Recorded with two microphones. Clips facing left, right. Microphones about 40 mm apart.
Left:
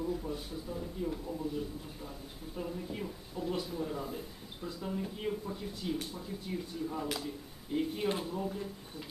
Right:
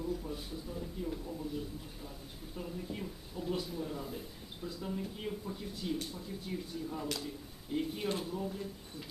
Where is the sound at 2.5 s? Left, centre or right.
Centre.